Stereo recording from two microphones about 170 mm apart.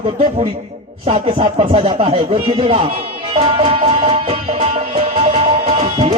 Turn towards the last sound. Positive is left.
turn(degrees=-35)  # may be behind; listen again after turning